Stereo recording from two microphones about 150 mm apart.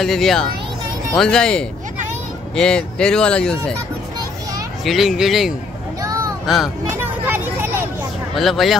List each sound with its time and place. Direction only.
0.0 s speech: centre (ahead or behind)
4.8 s speech: centre (ahead or behind)
5.9 s a sound: 25° right (ahead or behind)
6.4 s speech: centre (ahead or behind)
6.9 s a sound: 15° right (ahead or behind)
8.4 s speech: centre (ahead or behind)